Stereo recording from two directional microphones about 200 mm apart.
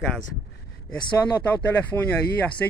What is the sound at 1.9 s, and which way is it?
Speech, 15° left (ahead or behind).